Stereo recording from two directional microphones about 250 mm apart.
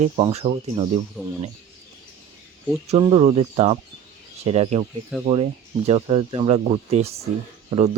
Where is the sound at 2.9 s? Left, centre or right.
Right.